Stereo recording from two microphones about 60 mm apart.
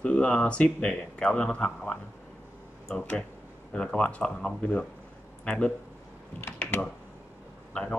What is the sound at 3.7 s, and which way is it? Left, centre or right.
Speech, centre.